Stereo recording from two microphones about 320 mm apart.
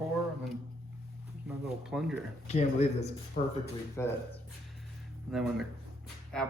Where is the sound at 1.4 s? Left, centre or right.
Centre.